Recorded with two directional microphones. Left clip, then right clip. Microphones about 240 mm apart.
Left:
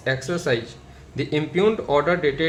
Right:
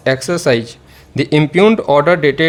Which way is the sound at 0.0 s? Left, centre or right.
Right.